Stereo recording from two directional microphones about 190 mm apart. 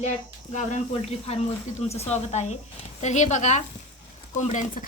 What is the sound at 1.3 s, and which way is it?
A woman's voice, 35° left (ahead or behind).